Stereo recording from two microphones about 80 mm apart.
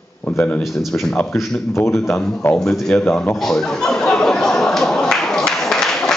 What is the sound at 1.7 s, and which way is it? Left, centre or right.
Speech, left.